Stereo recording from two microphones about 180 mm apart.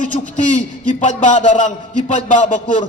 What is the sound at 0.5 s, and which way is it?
A man's voice, 45° left (ahead or behind).